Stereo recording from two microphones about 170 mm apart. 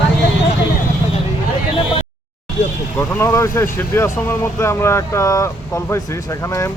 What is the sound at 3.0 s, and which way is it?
Speech, 15° left (ahead or behind).